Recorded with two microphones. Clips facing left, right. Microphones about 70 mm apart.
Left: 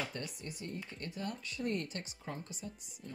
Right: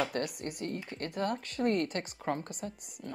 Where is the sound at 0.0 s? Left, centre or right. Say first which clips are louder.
Right 9 dB; right.